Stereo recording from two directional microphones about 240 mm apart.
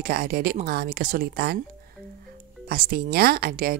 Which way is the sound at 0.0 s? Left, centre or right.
Right.